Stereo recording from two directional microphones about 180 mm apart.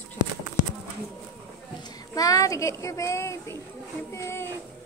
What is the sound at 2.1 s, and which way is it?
Speech, 20° left (ahead or behind).